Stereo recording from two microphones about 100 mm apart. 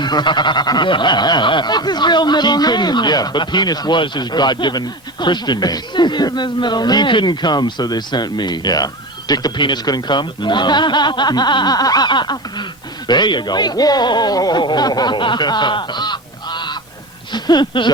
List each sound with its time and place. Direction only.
0.0 s speech: 45° left (ahead or behind)